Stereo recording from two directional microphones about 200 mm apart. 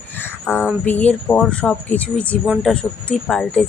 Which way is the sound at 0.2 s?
10° left (ahead or behind).